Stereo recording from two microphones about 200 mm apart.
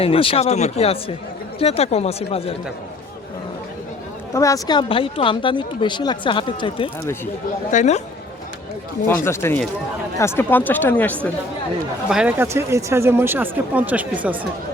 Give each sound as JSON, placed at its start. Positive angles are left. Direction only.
{"t": 0.0, "sound": "speech", "side_deg": 30}
{"t": 4.4, "sound": "speech", "side_deg": 15}
{"t": 9.0, "sound": "speech", "side_deg": 10}
{"t": 12.0, "sound": "speech", "side_deg": -5}